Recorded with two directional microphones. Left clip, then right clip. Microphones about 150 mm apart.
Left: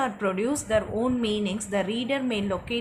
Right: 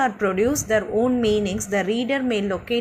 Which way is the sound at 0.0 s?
20° right (ahead or behind).